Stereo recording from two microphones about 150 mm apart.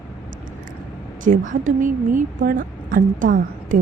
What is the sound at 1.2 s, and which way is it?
A woman's voice, 60° right (ahead or behind).